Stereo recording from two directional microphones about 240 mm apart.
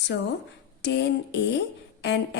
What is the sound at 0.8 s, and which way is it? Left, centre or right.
A woman's voice, left.